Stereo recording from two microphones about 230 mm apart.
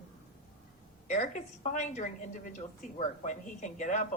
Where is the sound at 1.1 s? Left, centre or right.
Left.